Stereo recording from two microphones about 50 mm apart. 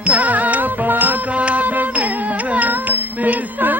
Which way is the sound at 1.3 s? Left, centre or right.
Right.